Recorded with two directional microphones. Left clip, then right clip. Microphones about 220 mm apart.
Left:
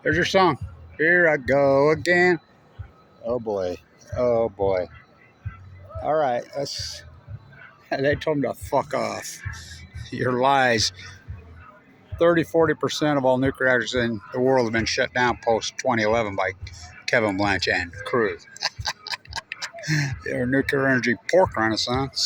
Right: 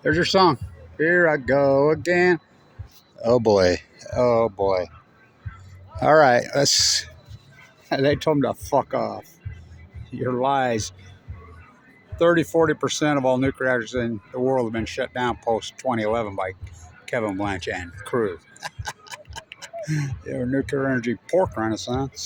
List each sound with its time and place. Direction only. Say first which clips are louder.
0.0 s speech: right 1 dB; 30° right (ahead or behind); by 2.4 s 15° right (ahead or behind)
3.2 s speech: right 8 dB; 55° right (ahead or behind)
4.1 s speech: right 2 dB; 35° right (ahead or behind)
6.0 s speech: right 7 dB; 50° right (ahead or behind)
7.9 s speech: right 2 dB; 35° right (ahead or behind); by 10.8 s 10° right (ahead or behind)
12.1 s speech: even; 10° right (ahead or behind)